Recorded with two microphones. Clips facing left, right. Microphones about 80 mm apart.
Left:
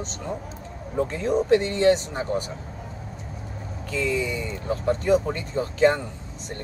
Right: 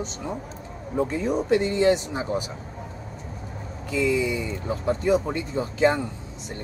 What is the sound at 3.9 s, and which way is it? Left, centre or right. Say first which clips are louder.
Speech: right 3 dB; centre.